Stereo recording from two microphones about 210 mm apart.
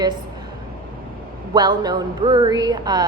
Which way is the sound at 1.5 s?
20° right (ahead or behind).